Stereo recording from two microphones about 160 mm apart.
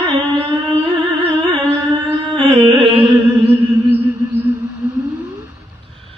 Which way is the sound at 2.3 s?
35° right (ahead or behind).